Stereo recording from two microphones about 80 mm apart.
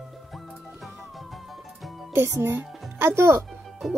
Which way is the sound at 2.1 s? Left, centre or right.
Right.